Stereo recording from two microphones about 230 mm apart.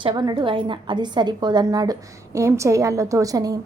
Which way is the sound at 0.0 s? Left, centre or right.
Centre.